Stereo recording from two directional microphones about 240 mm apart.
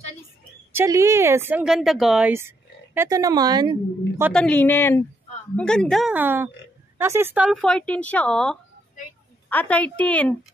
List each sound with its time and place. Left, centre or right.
0.7 s speech: centre
4.3 s speech: centre